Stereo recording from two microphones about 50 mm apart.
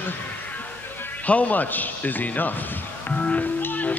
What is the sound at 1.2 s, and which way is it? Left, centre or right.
Speech, left.